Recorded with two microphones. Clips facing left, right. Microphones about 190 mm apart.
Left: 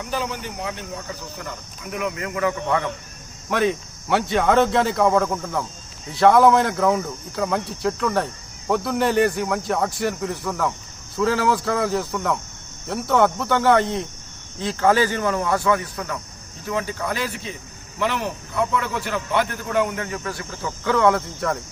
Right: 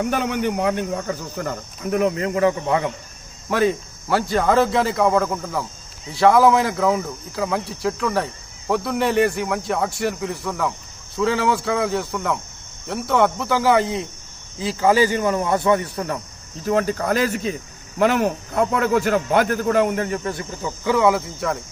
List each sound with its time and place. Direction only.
0.0 s speech: 60° right (ahead or behind)
1.8 s speech: 35° right (ahead or behind); by 2.9 s 20° right (ahead or behind)
3.5 s speech: centre (ahead or behind); by 16.1 s 30° right (ahead or behind)
16.6 s cricket: 45° right (ahead or behind)
18.0 s a man's voice: 50° right (ahead or behind); by 21.6 s centre (ahead or behind)